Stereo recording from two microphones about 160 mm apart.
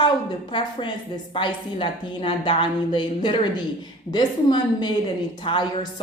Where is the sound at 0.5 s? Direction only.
30° left (ahead or behind).